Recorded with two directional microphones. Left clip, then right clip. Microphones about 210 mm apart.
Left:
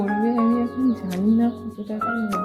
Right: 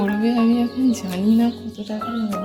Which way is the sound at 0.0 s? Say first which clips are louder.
Right 1 dB; 5° right (ahead or behind).